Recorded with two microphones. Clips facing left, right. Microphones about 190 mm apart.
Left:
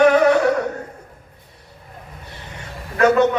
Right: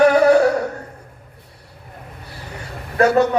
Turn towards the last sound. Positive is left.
turn(degrees=-35)  # may be behind; listen again after turning